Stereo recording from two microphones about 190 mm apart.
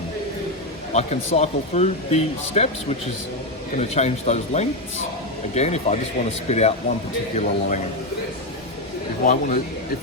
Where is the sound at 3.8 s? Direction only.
35° left (ahead or behind).